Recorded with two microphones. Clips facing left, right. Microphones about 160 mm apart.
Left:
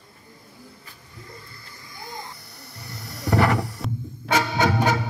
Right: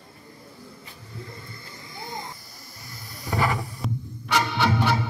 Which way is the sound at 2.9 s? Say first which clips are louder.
Left 7 dB; 75° left (ahead or behind).